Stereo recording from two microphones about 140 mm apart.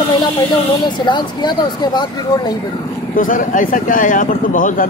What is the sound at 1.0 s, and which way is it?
Speech, 30° left (ahead or behind).